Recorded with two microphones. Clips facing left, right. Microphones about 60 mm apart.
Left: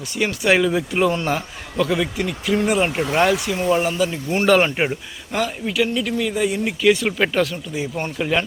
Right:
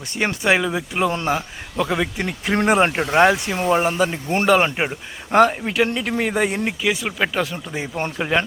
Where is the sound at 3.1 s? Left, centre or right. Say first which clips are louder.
Right 3 dB; right.